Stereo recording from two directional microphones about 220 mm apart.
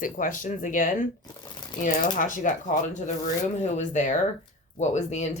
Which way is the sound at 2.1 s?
35° left (ahead or behind).